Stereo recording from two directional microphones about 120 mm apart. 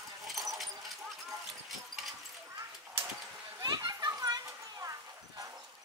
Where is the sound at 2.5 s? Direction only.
30° right (ahead or behind).